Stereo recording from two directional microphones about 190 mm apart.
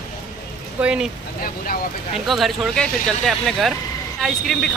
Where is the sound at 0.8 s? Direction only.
5° right (ahead or behind).